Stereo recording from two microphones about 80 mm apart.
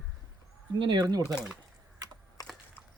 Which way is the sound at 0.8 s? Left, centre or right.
Right.